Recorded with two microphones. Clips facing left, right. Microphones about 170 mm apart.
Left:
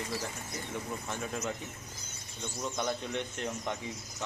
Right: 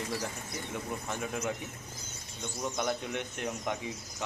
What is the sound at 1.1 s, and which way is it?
Speech, 10° right (ahead or behind).